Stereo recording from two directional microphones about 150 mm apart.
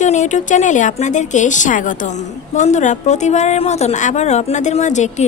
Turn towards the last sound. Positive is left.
turn(degrees=55)  # may be behind; listen again after turning